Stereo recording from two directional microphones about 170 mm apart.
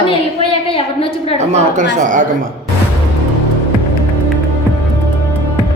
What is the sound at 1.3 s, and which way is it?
Speech, 40° right (ahead or behind).